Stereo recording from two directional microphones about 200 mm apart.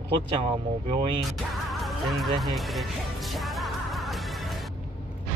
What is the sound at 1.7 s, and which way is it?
Music, centre (ahead or behind).